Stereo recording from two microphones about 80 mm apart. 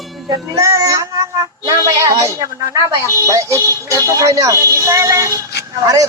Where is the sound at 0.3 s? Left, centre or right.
Right.